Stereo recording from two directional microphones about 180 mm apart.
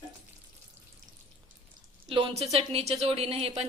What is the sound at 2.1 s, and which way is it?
A woman's voice, 30° right (ahead or behind).